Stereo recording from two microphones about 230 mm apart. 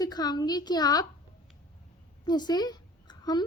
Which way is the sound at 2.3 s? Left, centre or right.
Centre.